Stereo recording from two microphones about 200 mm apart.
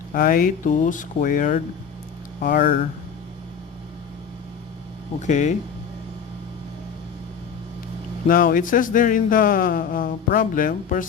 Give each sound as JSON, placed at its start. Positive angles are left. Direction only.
{"t": 0.1, "sound": "speech", "side_deg": 45}
{"t": 5.2, "sound": "speech", "side_deg": 35}
{"t": 8.3, "sound": "speech", "side_deg": 45}